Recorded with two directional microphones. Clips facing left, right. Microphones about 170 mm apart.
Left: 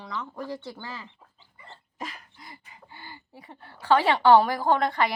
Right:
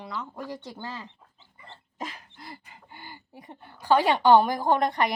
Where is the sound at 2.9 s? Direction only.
15° right (ahead or behind).